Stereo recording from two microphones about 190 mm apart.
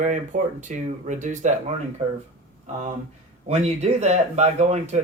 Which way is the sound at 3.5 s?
35° right (ahead or behind).